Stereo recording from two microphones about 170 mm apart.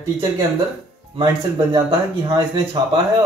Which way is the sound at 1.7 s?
25° right (ahead or behind).